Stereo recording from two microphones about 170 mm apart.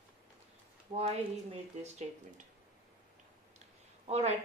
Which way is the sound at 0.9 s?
35° right (ahead or behind).